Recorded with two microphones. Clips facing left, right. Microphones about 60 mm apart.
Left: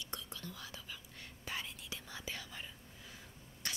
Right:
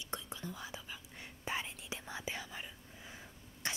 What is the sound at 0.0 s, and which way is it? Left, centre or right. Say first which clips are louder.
Whispering: right 3 dB; right.